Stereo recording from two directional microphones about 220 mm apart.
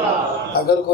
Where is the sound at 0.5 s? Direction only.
45° left (ahead or behind).